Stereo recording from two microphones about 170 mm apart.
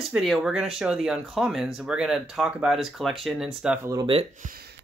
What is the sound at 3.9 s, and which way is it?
Speech, 30° right (ahead or behind).